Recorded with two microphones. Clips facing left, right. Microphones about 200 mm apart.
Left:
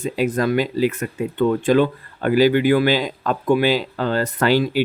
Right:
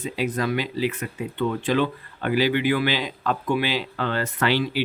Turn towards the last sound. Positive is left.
turn(degrees=45)  # may be behind; listen again after turning